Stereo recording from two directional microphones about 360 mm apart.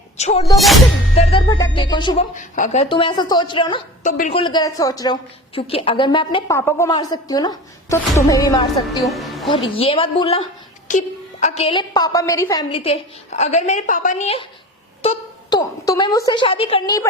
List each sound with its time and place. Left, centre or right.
0.2 s a woman's voice: centre
0.5 s music: centre
1.2 s a woman's voice: centre
9.0 s a woman's voice: centre
9.7 s a woman's voice: centre